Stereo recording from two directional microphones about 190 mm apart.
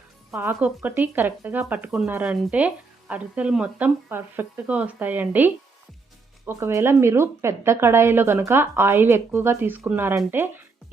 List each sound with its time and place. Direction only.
0.3 s speech: 10° right (ahead or behind)